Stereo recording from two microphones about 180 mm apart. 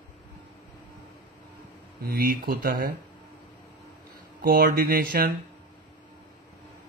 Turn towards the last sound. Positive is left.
turn(degrees=-55)  # may be behind; listen again after turning